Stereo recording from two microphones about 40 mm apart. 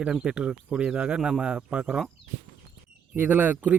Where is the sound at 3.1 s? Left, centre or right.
Right.